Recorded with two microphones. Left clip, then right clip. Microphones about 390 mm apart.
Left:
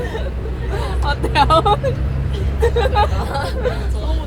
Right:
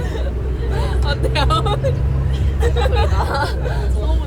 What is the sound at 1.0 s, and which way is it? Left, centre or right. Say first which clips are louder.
Speech: left 6 dB; centre.